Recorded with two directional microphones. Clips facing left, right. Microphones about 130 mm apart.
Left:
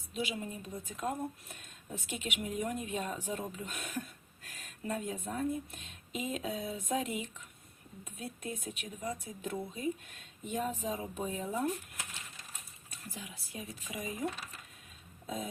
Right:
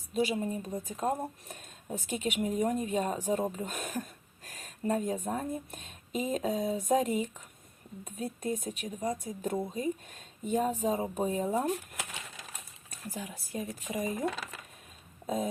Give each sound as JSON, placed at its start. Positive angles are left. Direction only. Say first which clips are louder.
{"t": 0.1, "sound": "speech", "louder": "right 8 dB", "side_deg": -40}
{"t": 11.7, "sound": "a sound", "louder": "right 6 dB", "side_deg": -65}
{"t": 12.9, "sound": "speech", "louder": "right 7 dB", "side_deg": -45}
{"t": 14.3, "sound": "speech", "louder": "right 5 dB", "side_deg": -90}